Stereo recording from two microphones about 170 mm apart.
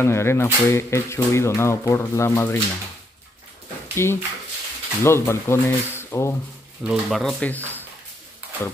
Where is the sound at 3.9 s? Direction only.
15° left (ahead or behind).